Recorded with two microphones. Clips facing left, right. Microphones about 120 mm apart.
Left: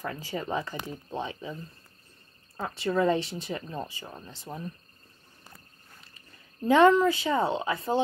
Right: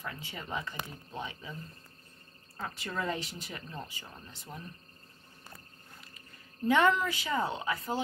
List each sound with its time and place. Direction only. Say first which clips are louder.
0.0 s speech: left 8 dB; 35° left (ahead or behind)
2.5 s speech: left 9 dB; 30° left (ahead or behind)
6.7 s speech: left 7 dB; 30° left (ahead or behind)